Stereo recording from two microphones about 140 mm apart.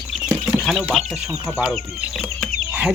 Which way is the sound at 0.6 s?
5° right (ahead or behind).